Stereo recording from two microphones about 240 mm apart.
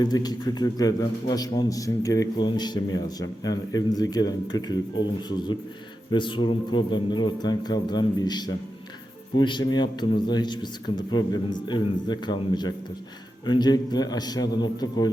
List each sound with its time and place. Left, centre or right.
0.0 s a man's voice: centre